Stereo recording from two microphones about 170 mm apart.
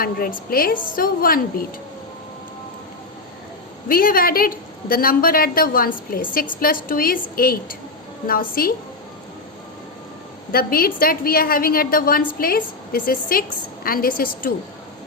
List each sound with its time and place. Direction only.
0.0 s a woman's voice: 60° left (ahead or behind)
3.8 s a woman's voice: 60° left (ahead or behind)
10.5 s a woman's voice: 60° left (ahead or behind)